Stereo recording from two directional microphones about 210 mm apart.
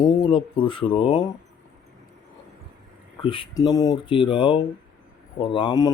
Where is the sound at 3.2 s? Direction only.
25° left (ahead or behind).